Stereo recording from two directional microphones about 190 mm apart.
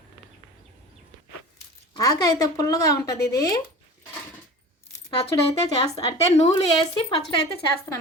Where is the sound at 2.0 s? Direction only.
20° left (ahead or behind).